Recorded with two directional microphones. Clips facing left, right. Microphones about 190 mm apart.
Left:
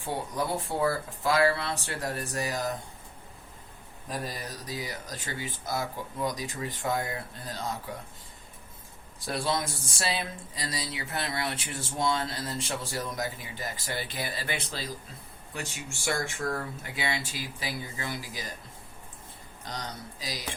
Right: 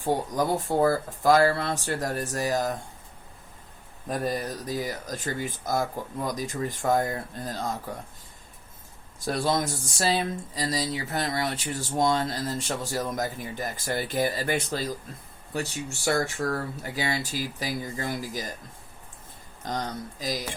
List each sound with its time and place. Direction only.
0.0 s speech: 40° right (ahead or behind)
4.1 s speech: 50° right (ahead or behind)
9.2 s speech: 40° right (ahead or behind)
19.6 s speech: 45° right (ahead or behind)